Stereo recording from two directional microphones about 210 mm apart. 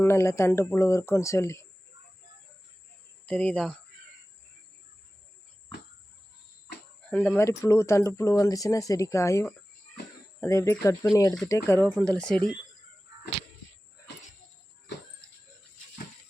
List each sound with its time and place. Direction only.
0.0 s speech: 10° left (ahead or behind)
3.2 s speech: 5° left (ahead or behind)
7.1 s speech: 10° left (ahead or behind)